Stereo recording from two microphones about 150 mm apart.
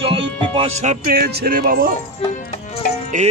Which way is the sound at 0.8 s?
75° right (ahead or behind).